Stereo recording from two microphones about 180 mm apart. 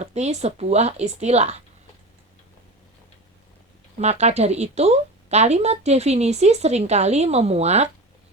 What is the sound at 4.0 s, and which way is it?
Speech, 40° right (ahead or behind).